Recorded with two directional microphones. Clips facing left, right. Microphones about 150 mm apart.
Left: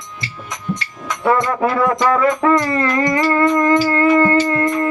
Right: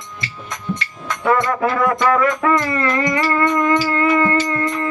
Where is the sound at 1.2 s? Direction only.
25° left (ahead or behind).